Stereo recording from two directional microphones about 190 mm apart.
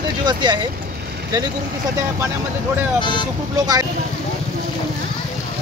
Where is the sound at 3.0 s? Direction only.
25° left (ahead or behind).